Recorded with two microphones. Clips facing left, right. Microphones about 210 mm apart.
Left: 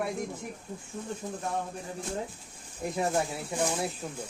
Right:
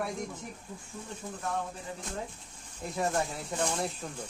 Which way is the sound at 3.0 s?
10° left (ahead or behind).